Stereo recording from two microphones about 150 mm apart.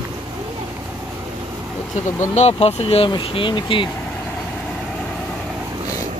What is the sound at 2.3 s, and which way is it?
Speech, 45° left (ahead or behind).